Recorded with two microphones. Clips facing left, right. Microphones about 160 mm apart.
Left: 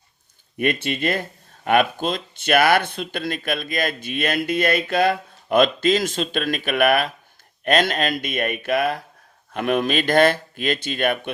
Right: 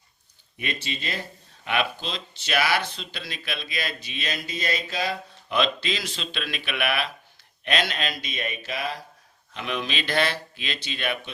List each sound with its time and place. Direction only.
0.5 s speech: 55° left (ahead or behind)